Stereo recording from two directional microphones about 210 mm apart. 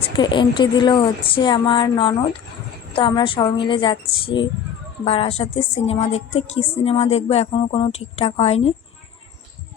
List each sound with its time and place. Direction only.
0.0 s a woman's voice: 20° left (ahead or behind)